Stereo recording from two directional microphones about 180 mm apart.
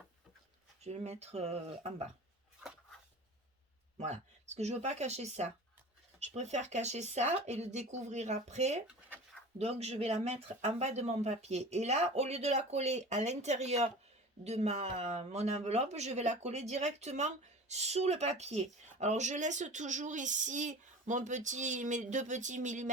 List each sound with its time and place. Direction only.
0.9 s speech: 35° right (ahead or behind)
3.9 s speech: 40° right (ahead or behind)